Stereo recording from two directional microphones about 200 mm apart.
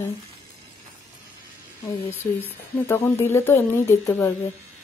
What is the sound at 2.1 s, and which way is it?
Speech, 10° left (ahead or behind).